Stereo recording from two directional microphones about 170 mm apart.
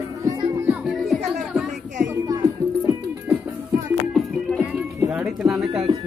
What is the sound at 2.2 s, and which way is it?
Music, 20° right (ahead or behind).